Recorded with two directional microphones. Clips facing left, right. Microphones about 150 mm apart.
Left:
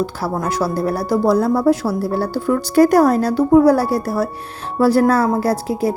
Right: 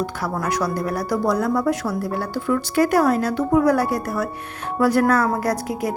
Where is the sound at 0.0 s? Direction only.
30° left (ahead or behind).